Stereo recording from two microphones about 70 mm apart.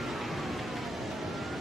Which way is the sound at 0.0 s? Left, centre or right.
Centre.